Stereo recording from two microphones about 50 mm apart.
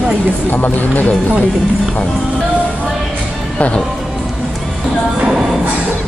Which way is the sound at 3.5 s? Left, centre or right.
Left.